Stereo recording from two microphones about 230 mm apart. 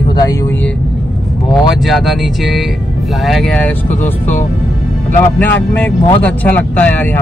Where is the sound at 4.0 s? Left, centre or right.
Left.